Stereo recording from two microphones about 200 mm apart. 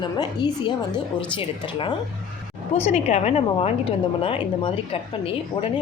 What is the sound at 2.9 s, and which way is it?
A woman's voice, 30° left (ahead or behind).